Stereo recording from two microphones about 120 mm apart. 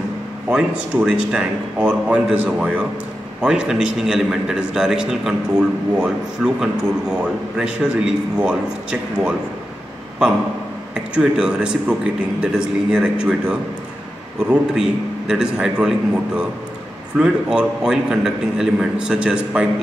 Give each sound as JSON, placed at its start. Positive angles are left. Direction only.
{"t": 0.5, "sound": "a man's voice", "side_deg": -5}
{"t": 11.1, "sound": "a man's voice", "side_deg": -10}
{"t": 17.2, "sound": "a man's voice", "side_deg": -5}